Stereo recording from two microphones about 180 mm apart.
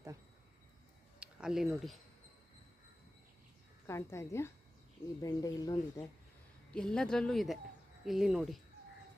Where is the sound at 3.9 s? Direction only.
15° left (ahead or behind).